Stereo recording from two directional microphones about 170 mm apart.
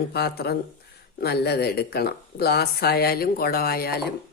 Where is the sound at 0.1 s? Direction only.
70° left (ahead or behind).